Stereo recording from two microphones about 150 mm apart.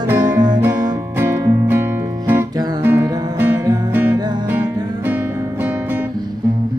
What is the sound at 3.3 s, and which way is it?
Music, 15° right (ahead or behind).